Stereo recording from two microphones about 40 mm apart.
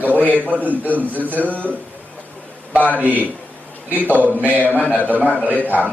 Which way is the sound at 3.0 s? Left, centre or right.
Right.